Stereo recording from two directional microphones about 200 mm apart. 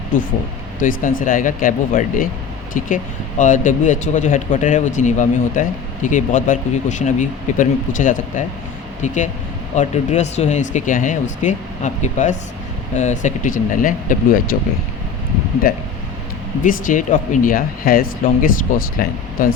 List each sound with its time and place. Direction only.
0.1 s speech: 40° left (ahead or behind)